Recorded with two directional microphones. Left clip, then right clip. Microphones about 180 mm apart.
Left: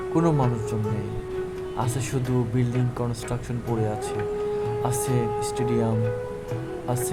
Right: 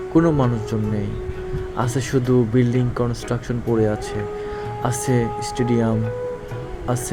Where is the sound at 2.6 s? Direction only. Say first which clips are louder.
Right 7 dB; 20° right (ahead or behind).